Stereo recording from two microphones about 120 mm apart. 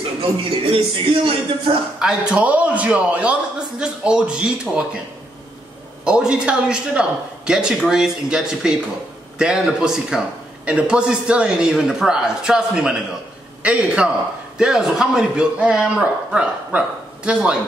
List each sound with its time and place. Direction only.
0.7 s speech: 50° right (ahead or behind)
2.0 s a man's voice: 5° right (ahead or behind)
6.0 s a man's voice: 10° right (ahead or behind)